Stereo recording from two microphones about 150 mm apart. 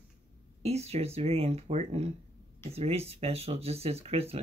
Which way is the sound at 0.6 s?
45° right (ahead or behind).